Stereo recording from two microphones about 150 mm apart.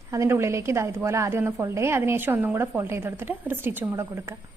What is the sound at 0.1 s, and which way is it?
A woman's voice, 20° right (ahead or behind).